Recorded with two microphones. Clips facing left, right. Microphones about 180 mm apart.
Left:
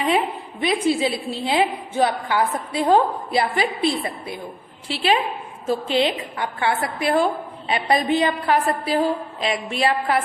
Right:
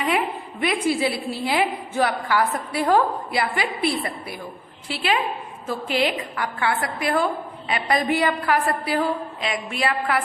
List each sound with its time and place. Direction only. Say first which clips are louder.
0.6 s a woman's voice: left 2 dB; 25° left (ahead or behind)